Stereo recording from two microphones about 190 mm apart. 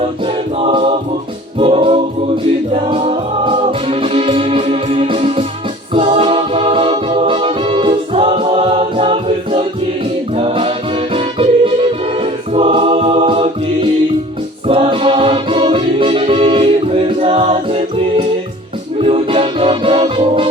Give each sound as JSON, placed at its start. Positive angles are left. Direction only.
{"t": 0.6, "sound": "choir", "side_deg": -30}
{"t": 1.5, "sound": "music", "side_deg": -30}
{"t": 14.7, "sound": "music", "side_deg": -30}